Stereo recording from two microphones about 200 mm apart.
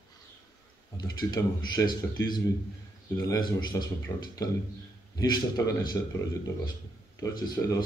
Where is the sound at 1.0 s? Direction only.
20° left (ahead or behind).